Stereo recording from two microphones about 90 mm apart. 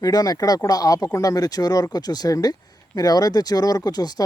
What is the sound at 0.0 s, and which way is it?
Speech, 45° left (ahead or behind).